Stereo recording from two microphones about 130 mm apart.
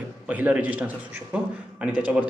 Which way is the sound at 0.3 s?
10° right (ahead or behind).